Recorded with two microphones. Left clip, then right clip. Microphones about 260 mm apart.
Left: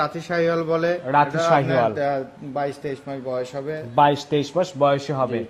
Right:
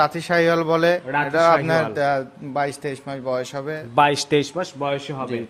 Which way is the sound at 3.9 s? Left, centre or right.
Centre.